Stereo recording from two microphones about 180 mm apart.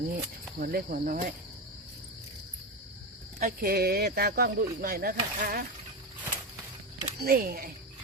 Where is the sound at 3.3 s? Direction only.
50° right (ahead or behind).